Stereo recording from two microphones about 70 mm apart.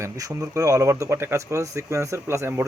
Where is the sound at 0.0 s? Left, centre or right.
Right.